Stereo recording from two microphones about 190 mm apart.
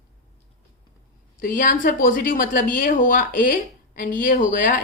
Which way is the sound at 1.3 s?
45° left (ahead or behind).